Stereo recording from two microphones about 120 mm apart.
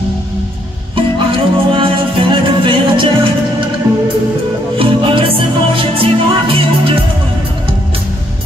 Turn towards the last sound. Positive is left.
turn(degrees=-50)  # may be behind; listen again after turning